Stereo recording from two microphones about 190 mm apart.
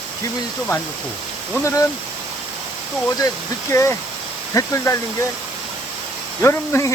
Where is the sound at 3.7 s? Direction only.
15° left (ahead or behind).